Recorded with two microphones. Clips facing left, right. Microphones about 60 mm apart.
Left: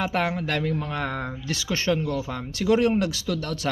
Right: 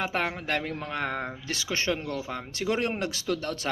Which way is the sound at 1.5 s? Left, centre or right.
Right.